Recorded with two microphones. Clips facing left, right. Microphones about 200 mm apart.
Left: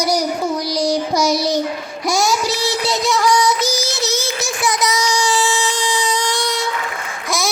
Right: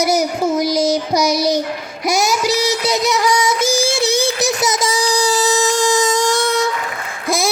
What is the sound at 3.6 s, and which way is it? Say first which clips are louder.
Music: right 4 dB; 50° right (ahead or behind).